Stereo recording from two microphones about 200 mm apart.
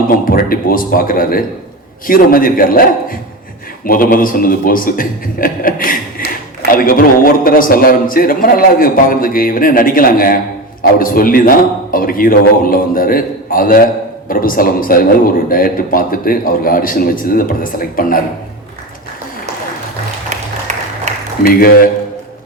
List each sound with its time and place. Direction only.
0.1 s a man's voice: 45° left (ahead or behind)
21.4 s a man's voice: 45° left (ahead or behind)